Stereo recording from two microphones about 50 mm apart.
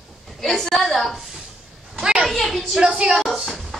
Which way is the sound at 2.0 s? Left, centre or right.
Centre.